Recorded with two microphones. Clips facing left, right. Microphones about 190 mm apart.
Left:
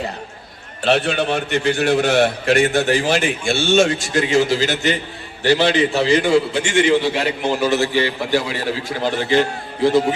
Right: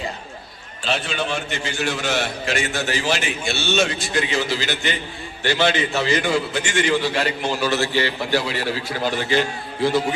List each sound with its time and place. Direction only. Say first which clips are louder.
0.9 s a man's voice: left 7 dB; 60° left (ahead or behind); by 8.5 s 15° left (ahead or behind)